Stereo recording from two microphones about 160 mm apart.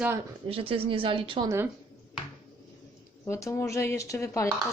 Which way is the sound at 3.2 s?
15° left (ahead or behind).